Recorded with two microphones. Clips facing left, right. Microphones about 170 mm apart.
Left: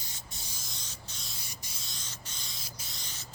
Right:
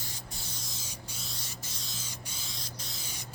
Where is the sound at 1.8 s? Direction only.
5° right (ahead or behind).